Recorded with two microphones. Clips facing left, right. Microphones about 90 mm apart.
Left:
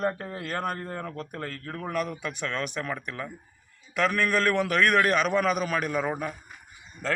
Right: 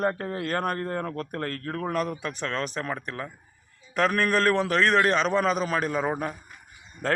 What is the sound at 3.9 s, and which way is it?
A man's voice, 40° right (ahead or behind).